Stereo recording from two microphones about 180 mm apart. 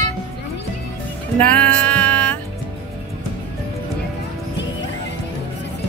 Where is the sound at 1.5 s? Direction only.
10° left (ahead or behind).